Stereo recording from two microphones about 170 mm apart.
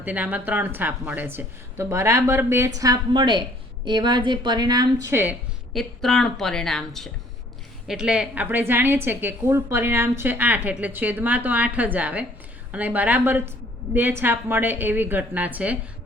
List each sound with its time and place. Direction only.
0.0 s a woman's voice: 10° right (ahead or behind)
5.7 s a woman's voice: centre (ahead or behind)